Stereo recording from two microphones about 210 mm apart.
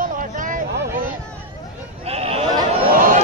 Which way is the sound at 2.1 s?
30° right (ahead or behind).